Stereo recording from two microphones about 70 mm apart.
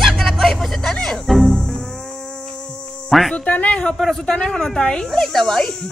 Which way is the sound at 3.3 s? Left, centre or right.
Left.